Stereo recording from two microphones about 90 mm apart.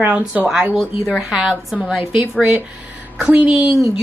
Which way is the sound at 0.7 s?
Centre (ahead or behind).